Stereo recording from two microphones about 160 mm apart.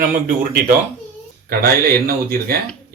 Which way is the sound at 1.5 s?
70° right (ahead or behind).